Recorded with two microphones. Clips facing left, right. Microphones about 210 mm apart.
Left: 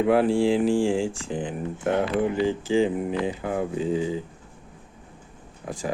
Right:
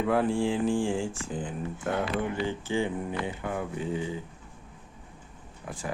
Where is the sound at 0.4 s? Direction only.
90° left.